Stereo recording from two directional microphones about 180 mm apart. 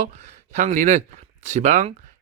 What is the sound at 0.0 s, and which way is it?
Speech, 40° right (ahead or behind).